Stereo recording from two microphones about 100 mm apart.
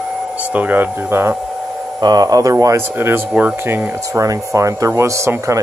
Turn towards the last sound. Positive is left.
turn(degrees=-30)  # may be behind; listen again after turning